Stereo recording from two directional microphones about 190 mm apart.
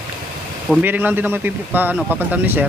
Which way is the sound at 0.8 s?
10° right (ahead or behind).